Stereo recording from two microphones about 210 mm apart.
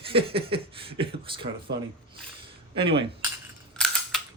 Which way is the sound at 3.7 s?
5° left (ahead or behind).